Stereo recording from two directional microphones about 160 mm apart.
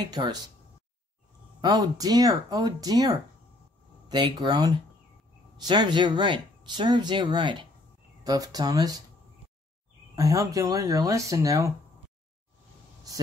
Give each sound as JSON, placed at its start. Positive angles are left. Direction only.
{"t": 0.1, "sound": "speech", "side_deg": -25}
{"t": 1.6, "sound": "speech", "side_deg": -25}
{"t": 10.1, "sound": "speech", "side_deg": -20}